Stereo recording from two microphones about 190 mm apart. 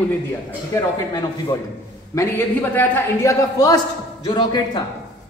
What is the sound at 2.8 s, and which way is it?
A woman's voice, 15° left (ahead or behind).